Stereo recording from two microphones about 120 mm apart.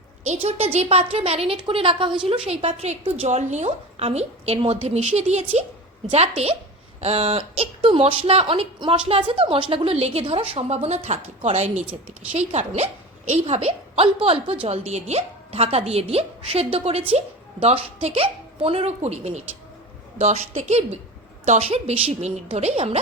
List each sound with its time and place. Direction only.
0.3 s a woman's voice: 60° right (ahead or behind); by 2.4 s 45° right (ahead or behind)
2.5 s a woman's voice: 55° right (ahead or behind)
14.8 s a woman's voice: 70° right (ahead or behind)
21.4 s a woman's voice: 80° right
21.7 s a woman's voice: 60° right (ahead or behind)